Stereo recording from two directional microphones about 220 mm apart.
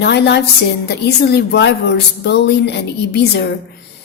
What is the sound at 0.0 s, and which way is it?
A woman's voice, 50° left (ahead or behind).